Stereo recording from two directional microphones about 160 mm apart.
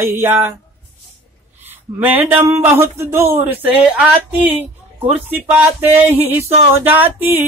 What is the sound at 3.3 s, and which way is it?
Speech, 40° right (ahead or behind).